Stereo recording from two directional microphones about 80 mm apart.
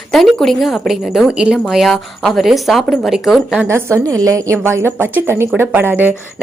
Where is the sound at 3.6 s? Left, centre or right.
Right.